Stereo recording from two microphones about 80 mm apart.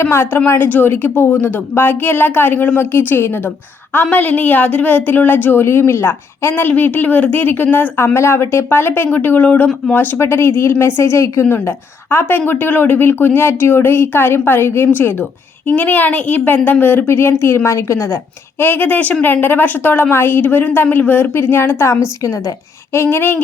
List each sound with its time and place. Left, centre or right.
0.0 s a woman's voice: left
6.5 s a woman's voice: left
18.6 s a woman's voice: left
23.0 s a woman's voice: left